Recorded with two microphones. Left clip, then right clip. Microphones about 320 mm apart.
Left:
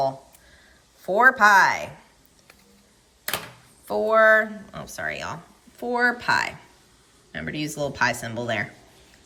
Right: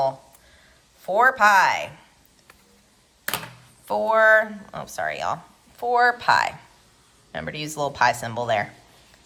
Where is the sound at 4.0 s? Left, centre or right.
Centre.